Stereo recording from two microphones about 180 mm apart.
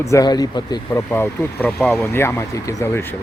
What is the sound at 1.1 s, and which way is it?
Speech, 10° left (ahead or behind).